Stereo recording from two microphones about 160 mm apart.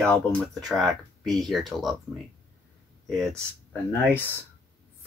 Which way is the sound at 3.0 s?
5° left (ahead or behind).